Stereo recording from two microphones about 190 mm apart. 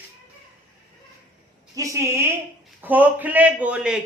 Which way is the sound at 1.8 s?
15° right (ahead or behind).